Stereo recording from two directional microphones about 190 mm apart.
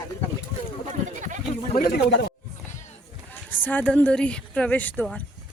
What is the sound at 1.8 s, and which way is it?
Speech, 55° left (ahead or behind).